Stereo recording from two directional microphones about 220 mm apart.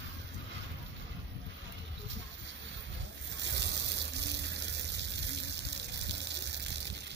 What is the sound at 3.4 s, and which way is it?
Water, 50° right (ahead or behind).